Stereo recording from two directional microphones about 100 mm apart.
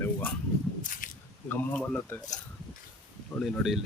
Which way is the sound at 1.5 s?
15° left (ahead or behind).